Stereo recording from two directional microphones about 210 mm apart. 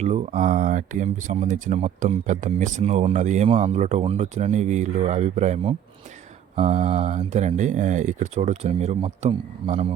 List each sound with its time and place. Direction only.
0.0 s speech: 35° right (ahead or behind)